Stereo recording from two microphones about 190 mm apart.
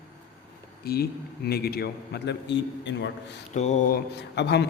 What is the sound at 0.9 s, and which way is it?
A man's voice, 55° left (ahead or behind).